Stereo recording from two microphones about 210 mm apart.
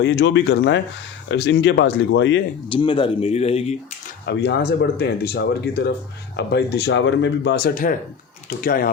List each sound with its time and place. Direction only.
0.0 s speech: 60° left (ahead or behind)
2.6 s speech: 25° left (ahead or behind)
4.3 s speech: 55° left (ahead or behind)